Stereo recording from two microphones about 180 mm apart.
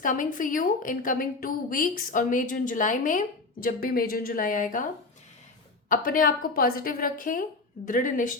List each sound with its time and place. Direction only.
0.0 s a woman's voice: 45° left (ahead or behind)
5.9 s a woman's voice: 50° left (ahead or behind)